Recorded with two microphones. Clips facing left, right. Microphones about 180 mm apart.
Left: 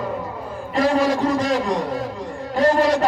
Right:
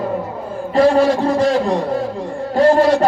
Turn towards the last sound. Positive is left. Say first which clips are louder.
# right 5 dB
turn(degrees=-30)  # may be behind; listen again after turning